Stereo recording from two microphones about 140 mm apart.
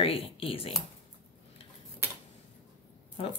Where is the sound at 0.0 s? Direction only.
40° left (ahead or behind).